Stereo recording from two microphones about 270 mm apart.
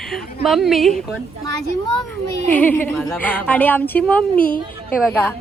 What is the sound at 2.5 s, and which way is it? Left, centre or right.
A woman's voice, centre.